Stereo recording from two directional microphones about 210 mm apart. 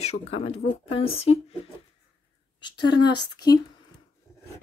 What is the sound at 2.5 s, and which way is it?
Speech, 20° left (ahead or behind).